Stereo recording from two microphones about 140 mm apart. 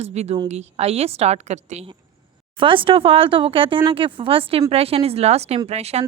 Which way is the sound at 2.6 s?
40° right (ahead or behind).